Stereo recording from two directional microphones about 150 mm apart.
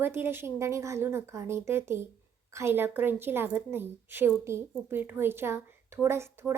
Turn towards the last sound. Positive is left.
turn(degrees=-15)  # may be behind; listen again after turning